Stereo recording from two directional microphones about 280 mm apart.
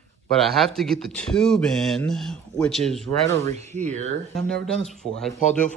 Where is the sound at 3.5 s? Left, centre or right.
Right.